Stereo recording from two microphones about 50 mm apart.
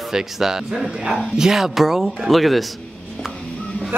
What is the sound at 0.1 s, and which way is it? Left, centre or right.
Speech, centre.